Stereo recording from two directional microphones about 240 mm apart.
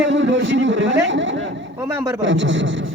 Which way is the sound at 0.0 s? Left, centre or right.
Right.